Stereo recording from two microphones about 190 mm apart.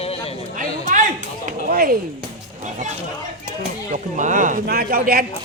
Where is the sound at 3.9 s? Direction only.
40° right (ahead or behind).